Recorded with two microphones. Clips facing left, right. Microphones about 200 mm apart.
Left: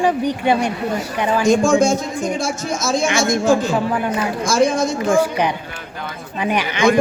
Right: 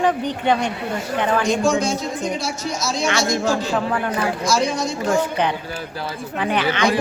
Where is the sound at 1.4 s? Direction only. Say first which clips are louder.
Left 5 dB; 45° left (ahead or behind).